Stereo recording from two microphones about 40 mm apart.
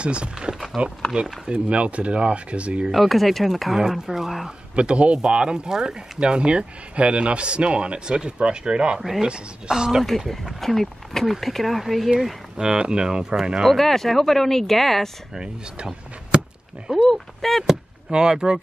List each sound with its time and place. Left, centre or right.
0.0 s speech: right
2.9 s speech: centre
4.0 s speech: centre
4.7 s speech: right
9.0 s speech: centre
10.0 s speech: centre
12.6 s speech: right
13.7 s speech: centre
15.3 s speech: right
16.9 s speech: centre
18.1 s speech: right